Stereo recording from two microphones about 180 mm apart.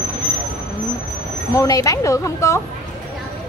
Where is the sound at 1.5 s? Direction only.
20° left (ahead or behind).